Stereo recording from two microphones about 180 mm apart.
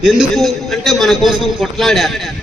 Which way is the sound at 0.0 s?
Centre (ahead or behind).